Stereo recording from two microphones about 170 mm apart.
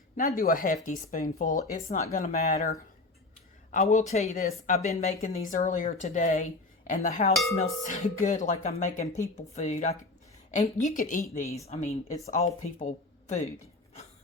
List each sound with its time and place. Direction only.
0.2 s speech: 60° left (ahead or behind)
3.7 s speech: 45° left (ahead or behind)
11.4 s a woman's voice: 20° left (ahead or behind)
11.7 s speech: 45° left (ahead or behind)